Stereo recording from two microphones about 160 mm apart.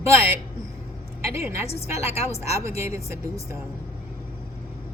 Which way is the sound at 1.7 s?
40° left (ahead or behind).